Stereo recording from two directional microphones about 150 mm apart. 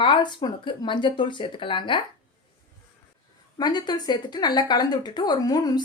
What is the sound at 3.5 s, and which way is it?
A woman's voice, 25° left (ahead or behind).